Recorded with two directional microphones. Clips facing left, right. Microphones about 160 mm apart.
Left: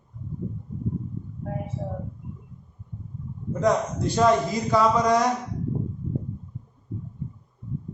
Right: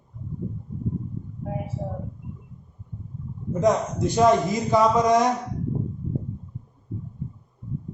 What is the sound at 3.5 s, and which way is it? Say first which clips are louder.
A man's voice: right 1 dB; 15° right (ahead or behind).